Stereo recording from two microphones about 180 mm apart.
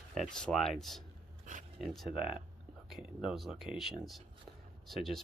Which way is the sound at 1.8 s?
Centre (ahead or behind).